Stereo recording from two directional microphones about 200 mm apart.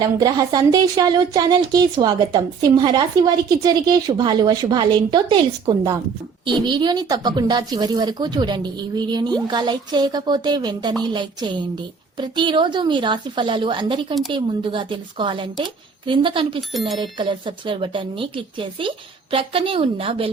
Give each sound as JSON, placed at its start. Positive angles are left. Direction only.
{"t": 0.0, "sound": "speech", "side_deg": -20}